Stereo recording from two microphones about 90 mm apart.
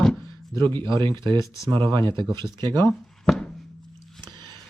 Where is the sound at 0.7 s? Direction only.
60° right (ahead or behind).